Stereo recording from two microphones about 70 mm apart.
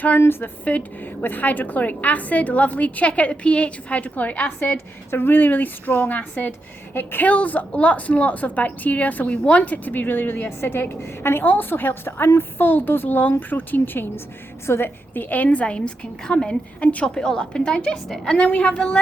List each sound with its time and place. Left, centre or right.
0.2 s a woman's voice: left; by 18.9 s centre